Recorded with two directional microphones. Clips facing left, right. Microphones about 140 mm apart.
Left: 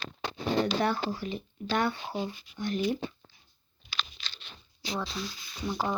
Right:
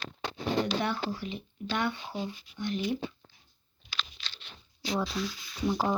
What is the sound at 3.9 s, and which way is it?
Crunch, 65° right (ahead or behind).